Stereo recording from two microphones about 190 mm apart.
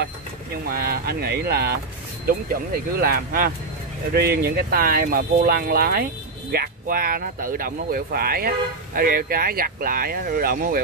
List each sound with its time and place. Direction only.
0.7 s speech: 50° right (ahead or behind)